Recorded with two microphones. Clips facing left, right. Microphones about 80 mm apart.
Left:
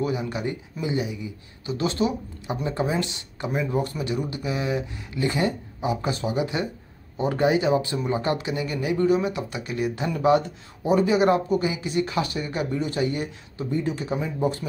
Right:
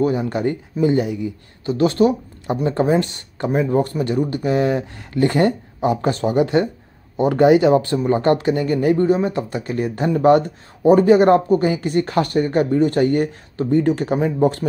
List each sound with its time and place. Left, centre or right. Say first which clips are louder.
0.0 s speech: right 8 dB; right